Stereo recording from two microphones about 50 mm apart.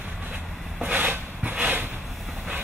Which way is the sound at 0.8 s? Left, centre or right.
Right.